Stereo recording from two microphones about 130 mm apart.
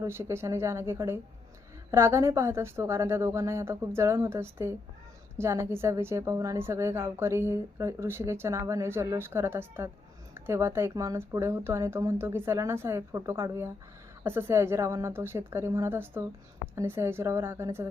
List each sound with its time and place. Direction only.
0.0 s a woman's voice: 20° right (ahead or behind)